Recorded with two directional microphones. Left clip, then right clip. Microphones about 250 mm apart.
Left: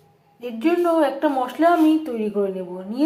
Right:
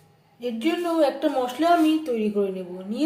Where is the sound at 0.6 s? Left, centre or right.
Centre.